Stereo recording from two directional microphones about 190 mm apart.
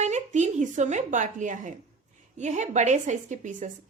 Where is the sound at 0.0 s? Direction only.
40° right (ahead or behind).